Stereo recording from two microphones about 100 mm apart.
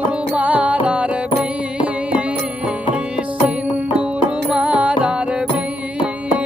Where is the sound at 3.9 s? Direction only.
10° right (ahead or behind).